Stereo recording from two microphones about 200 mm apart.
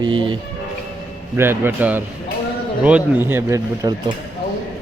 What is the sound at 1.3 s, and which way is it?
Speech, 10° right (ahead or behind).